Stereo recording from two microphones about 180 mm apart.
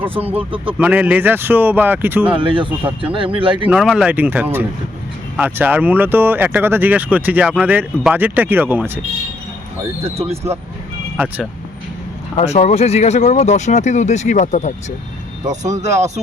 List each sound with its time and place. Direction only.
0.0 s speech: 10° right (ahead or behind)
2.3 s speech: 30° right (ahead or behind)
3.7 s speech: 5° right (ahead or behind)
10.0 s speech: 35° right (ahead or behind)
12.4 s speech: 40° left (ahead or behind)
16.0 s speech: 40° right (ahead or behind)